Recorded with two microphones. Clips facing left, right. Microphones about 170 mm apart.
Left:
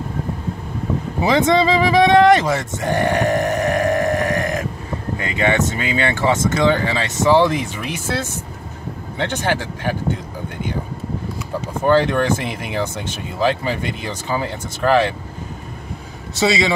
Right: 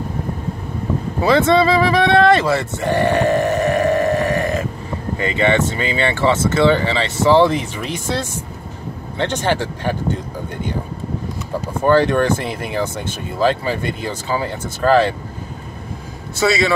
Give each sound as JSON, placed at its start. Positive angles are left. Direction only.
{"t": 1.2, "sound": "speech", "side_deg": 15}
{"t": 9.2, "sound": "speech", "side_deg": 10}
{"t": 11.8, "sound": "speech", "side_deg": 15}
{"t": 16.3, "sound": "a man's voice", "side_deg": 20}